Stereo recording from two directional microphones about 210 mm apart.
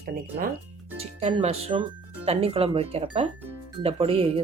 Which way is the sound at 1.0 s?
30° right (ahead or behind).